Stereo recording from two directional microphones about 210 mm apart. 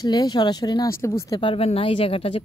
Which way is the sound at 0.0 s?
20° left (ahead or behind).